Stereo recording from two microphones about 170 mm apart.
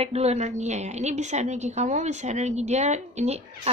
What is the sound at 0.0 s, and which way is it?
A woman's voice, 40° right (ahead or behind).